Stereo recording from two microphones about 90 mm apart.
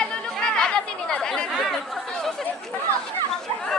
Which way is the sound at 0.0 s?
10° left (ahead or behind).